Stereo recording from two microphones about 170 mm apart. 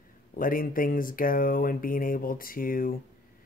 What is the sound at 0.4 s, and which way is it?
Speech, 55° left (ahead or behind).